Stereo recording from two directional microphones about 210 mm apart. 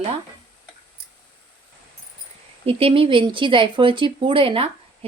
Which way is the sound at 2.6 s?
25° right (ahead or behind).